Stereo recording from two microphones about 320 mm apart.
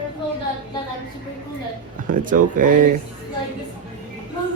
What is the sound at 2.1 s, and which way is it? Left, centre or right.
Speech, right.